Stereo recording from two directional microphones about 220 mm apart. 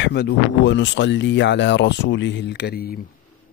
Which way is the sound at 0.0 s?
50° left (ahead or behind).